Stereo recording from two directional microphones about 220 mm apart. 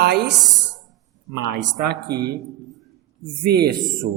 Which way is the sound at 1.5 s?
50° right (ahead or behind).